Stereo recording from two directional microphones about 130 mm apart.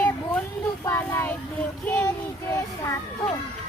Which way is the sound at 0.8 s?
20° left (ahead or behind).